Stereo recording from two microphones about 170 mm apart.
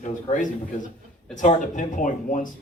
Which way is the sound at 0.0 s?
45° left (ahead or behind).